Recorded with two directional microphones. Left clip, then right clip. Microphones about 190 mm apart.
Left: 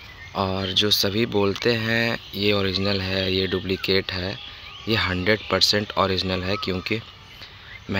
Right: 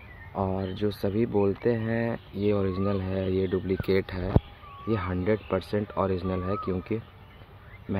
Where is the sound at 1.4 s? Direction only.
5° left (ahead or behind).